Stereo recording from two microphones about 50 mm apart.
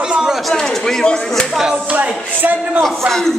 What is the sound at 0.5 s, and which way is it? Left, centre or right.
Speech, centre.